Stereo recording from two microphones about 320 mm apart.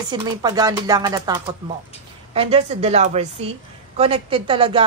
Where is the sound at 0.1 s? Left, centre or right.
Centre.